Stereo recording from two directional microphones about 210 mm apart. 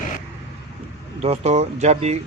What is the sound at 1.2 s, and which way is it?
Speech, 30° right (ahead or behind).